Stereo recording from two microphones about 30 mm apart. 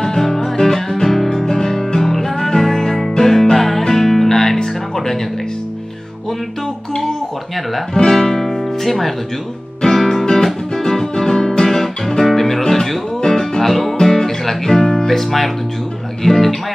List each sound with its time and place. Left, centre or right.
0.0 s music: centre
7.9 s guitar: centre
8.8 s music: centre
9.8 s guitar: centre
12.3 s music: centre